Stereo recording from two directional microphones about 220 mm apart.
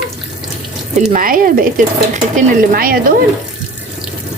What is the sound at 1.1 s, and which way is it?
Speech, 40° right (ahead or behind).